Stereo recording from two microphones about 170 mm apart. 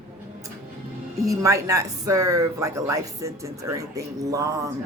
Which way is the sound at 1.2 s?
20° right (ahead or behind).